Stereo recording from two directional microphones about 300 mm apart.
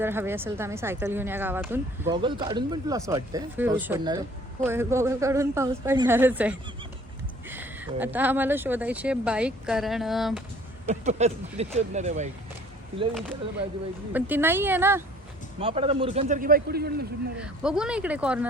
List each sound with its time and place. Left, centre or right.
0.0 s speech: centre
10.8 s speech: right
14.1 s speech: centre
15.6 s speech: centre
17.3 s speech: centre